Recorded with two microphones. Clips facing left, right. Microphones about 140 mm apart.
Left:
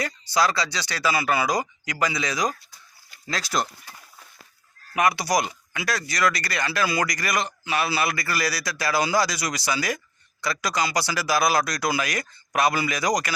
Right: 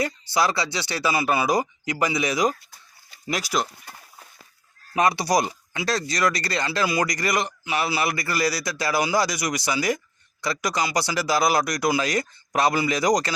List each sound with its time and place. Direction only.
0.3 s speech: 25° right (ahead or behind)
4.9 s speech: 25° right (ahead or behind)